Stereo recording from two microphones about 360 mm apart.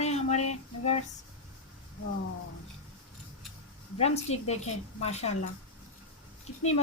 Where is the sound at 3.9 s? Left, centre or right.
Centre.